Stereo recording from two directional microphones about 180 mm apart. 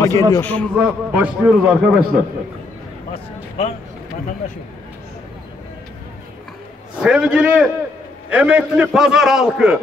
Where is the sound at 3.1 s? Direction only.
35° left (ahead or behind).